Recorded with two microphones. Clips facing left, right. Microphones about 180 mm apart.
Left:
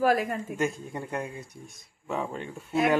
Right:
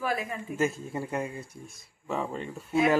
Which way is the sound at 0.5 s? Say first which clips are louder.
Right 4 dB; centre (ahead or behind).